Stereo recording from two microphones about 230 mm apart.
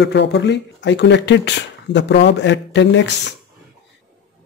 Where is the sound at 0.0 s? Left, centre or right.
Left.